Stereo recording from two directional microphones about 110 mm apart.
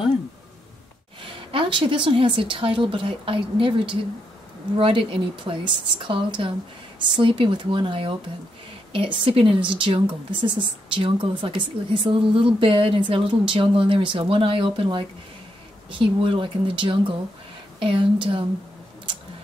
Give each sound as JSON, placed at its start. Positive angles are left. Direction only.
{"t": 1.5, "sound": "speech", "side_deg": -50}